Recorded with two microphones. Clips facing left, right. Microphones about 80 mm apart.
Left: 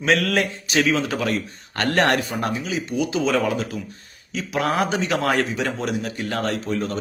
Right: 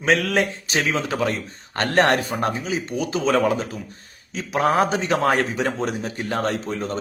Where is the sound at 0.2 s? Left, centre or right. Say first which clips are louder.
Even; right.